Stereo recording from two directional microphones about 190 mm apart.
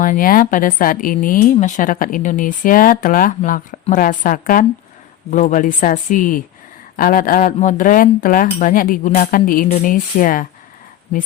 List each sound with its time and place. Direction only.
0.0 s speech: 45° left (ahead or behind)